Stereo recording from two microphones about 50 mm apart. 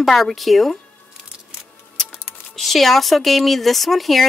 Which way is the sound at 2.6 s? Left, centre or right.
Centre.